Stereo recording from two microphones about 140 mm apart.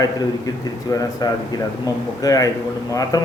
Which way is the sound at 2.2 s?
25° left (ahead or behind).